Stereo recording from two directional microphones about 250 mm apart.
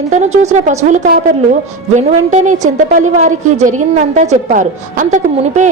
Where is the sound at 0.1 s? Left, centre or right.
Right.